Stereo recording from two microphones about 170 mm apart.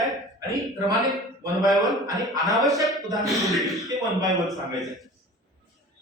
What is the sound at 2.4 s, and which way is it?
Speech, centre (ahead or behind).